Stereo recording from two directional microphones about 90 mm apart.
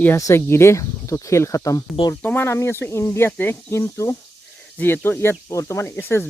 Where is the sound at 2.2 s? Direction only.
20° left (ahead or behind).